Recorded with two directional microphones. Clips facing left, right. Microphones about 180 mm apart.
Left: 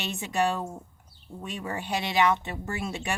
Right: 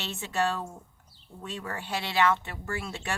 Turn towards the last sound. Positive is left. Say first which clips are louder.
# left 3 dB
turn(degrees=15)  # may be behind; listen again after turning